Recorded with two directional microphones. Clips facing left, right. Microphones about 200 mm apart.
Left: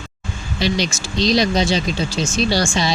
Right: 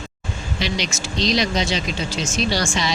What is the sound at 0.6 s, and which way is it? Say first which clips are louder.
Speech: left 6 dB; 35° left (ahead or behind).